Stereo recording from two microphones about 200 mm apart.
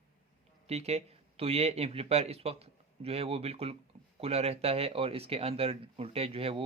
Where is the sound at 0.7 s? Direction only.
30° right (ahead or behind).